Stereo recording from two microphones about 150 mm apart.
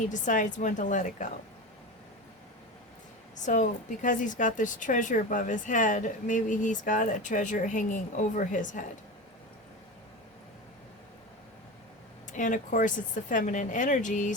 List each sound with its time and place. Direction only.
0.1 s a woman's voice: 55° left (ahead or behind)
3.4 s a woman's voice: 55° left (ahead or behind)
12.4 s a woman's voice: 60° left (ahead or behind)